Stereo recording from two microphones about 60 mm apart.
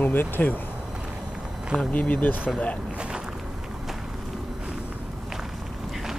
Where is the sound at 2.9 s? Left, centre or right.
Centre.